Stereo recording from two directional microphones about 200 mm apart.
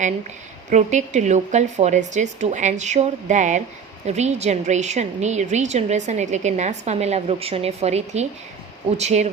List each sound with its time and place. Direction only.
0.7 s a woman's voice: 35° right (ahead or behind)